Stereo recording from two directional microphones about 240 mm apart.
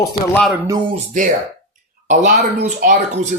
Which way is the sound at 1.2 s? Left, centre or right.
Right.